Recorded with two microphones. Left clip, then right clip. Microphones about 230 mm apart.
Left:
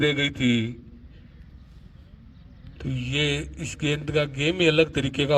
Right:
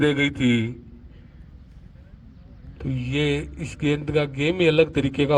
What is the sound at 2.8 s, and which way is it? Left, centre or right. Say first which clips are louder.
A man's voice: right 1 dB; left.